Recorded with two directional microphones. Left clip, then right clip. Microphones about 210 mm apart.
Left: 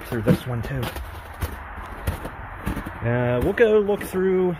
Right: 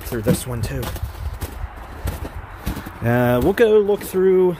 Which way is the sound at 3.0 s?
35° right (ahead or behind).